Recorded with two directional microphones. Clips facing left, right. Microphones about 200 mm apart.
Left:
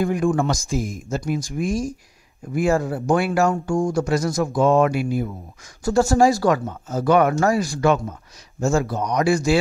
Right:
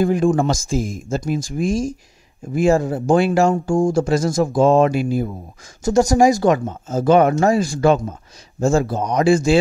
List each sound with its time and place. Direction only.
0.0 s speech: 30° right (ahead or behind)
5.9 s speech: 20° right (ahead or behind)